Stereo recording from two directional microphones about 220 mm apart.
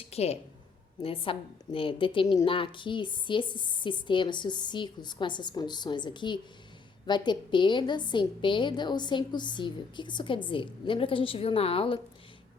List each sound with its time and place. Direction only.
0.1 s a woman's voice: 30° left (ahead or behind)